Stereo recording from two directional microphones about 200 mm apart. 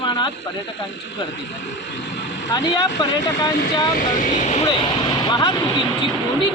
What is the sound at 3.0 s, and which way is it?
Speech, 20° left (ahead or behind).